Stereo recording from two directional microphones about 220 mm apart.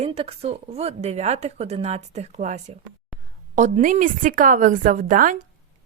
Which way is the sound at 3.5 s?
35° right (ahead or behind).